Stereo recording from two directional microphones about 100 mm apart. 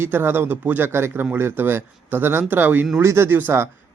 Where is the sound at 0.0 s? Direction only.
20° right (ahead or behind).